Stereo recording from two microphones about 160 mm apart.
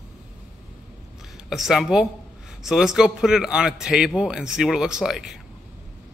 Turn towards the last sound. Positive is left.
turn(degrees=-5)  # may be behind; listen again after turning